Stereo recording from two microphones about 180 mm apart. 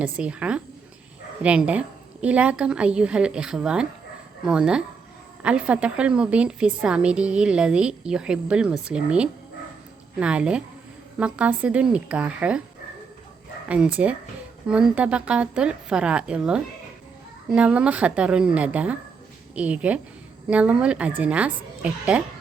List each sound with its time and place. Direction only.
0.0 s a woman's voice: 5° right (ahead or behind)
13.7 s a woman's voice: 5° right (ahead or behind)